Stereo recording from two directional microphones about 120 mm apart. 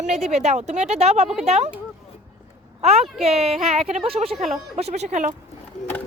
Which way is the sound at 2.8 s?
60° right (ahead or behind).